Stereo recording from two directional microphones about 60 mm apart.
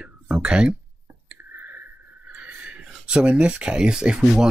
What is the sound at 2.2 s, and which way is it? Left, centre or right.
Speech, right.